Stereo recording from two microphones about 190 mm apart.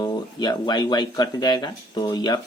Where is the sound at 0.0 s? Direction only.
20° left (ahead or behind).